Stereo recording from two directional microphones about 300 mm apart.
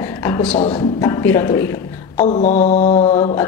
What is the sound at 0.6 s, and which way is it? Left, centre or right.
Mantra, centre.